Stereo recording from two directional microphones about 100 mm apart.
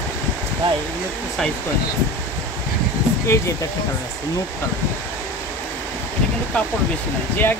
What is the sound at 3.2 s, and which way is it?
Speech, 30° left (ahead or behind).